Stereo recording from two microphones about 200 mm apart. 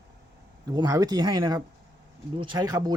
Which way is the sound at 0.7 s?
20° right (ahead or behind).